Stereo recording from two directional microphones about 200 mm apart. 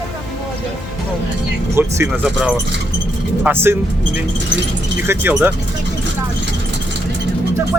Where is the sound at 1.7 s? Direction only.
10° right (ahead or behind).